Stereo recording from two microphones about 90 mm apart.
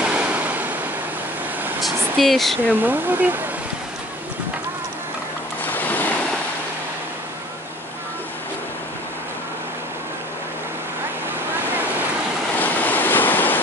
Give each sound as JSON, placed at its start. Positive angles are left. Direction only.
{"t": 0.0, "sound": "waves", "side_deg": -15}
{"t": 1.8, "sound": "a sound", "side_deg": 0}
{"t": 2.8, "sound": "speech", "side_deg": -20}
{"t": 5.6, "sound": "waves", "side_deg": 20}
{"t": 12.5, "sound": "waves", "side_deg": 20}